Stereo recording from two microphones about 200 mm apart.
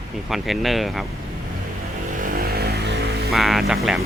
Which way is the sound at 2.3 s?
50° right (ahead or behind).